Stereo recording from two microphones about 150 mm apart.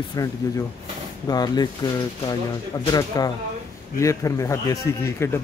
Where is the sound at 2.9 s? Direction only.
25° left (ahead or behind).